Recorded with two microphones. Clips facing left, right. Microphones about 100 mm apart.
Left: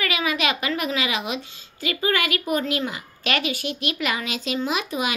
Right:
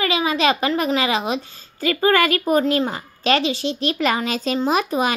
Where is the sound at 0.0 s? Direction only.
30° right (ahead or behind).